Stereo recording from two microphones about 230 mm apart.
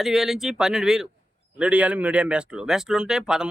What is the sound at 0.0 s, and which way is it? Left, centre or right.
Speech, centre.